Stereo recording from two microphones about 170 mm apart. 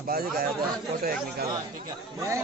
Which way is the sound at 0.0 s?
65° right (ahead or behind).